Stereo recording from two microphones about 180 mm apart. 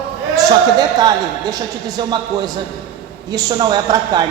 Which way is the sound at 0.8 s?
20° right (ahead or behind).